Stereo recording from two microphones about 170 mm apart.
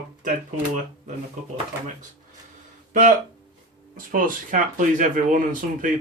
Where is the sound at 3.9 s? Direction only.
50° right (ahead or behind).